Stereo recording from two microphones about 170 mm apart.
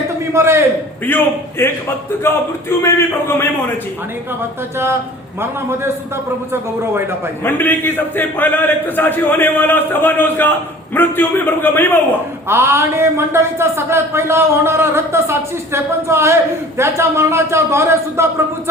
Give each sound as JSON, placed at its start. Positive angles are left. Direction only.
{"t": 0.3, "sound": "speech", "side_deg": -15}
{"t": 1.0, "sound": "a man's voice", "side_deg": 10}
{"t": 5.4, "sound": "speech", "side_deg": -15}
{"t": 7.4, "sound": "a man's voice", "side_deg": 10}
{"t": 12.5, "sound": "speech", "side_deg": -15}